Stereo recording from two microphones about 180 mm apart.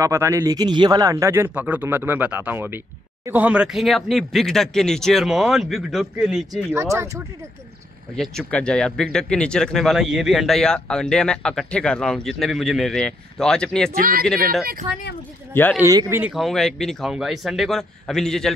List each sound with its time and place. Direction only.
0.0 s speech: 15° right (ahead or behind)
6.7 s speech: 15° right (ahead or behind)
8.2 s speech: 5° left (ahead or behind)
13.9 s speech: 55° right (ahead or behind)
15.8 s speech: 20° right (ahead or behind)
16.2 s speech: 5° right (ahead or behind)